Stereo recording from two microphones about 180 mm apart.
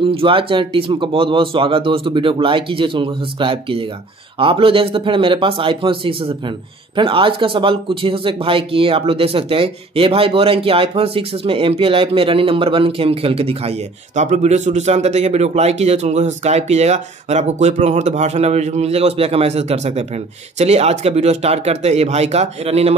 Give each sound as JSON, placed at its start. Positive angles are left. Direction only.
{"t": 0.0, "sound": "speech", "side_deg": -30}